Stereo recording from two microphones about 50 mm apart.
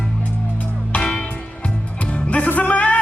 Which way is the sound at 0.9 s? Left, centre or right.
Centre.